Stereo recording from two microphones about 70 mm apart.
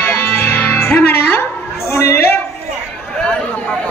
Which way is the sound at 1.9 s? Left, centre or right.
Left.